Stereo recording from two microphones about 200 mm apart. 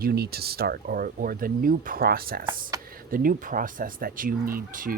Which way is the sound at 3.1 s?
45° right (ahead or behind).